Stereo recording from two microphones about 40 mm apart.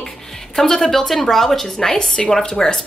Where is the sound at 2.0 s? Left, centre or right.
Left.